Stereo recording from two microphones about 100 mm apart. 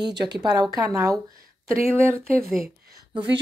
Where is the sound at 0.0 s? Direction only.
45° right (ahead or behind); by 2.1 s 25° right (ahead or behind).